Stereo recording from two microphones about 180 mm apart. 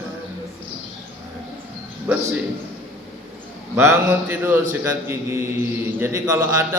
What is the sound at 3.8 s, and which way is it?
A man's voice, 15° right (ahead or behind).